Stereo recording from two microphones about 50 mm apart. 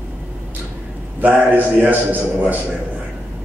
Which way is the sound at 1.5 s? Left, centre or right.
Right.